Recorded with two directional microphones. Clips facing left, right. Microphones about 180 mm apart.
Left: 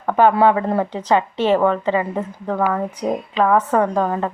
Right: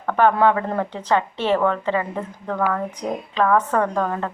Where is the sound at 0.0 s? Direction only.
15° left (ahead or behind).